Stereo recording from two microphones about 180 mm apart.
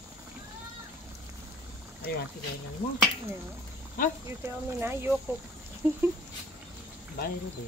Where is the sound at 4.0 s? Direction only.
50° left (ahead or behind).